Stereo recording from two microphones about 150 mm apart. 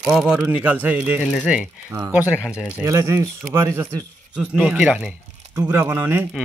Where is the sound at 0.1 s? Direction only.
5° right (ahead or behind).